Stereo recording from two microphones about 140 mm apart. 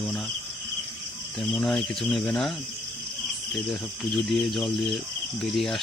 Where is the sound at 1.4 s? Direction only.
5° left (ahead or behind).